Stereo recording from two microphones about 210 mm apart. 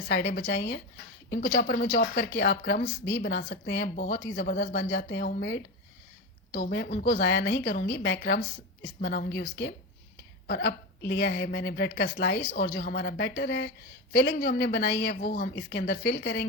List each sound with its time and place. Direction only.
0.1 s speech: 50° left (ahead or behind)